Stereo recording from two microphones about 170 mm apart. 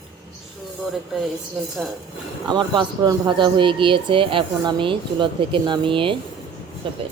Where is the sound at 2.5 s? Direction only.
25° right (ahead or behind).